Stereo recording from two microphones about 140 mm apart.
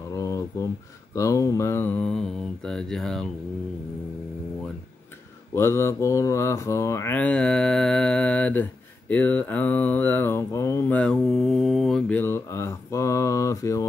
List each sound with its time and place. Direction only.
0.2 s a sound: 25° left (ahead or behind)
1.1 s mantra: 25° left (ahead or behind); by 3.3 s 5° left (ahead or behind)
5.5 s mantra: 20° left (ahead or behind); by 12.2 s 5° left (ahead or behind)
12.2 s mantra: 15° left (ahead or behind)